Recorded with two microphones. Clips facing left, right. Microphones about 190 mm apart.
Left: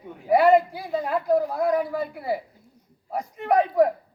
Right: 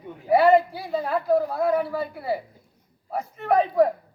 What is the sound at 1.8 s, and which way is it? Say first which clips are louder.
Speech: even; 15° left (ahead or behind).